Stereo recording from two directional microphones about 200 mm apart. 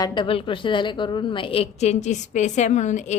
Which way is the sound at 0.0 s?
25° left (ahead or behind).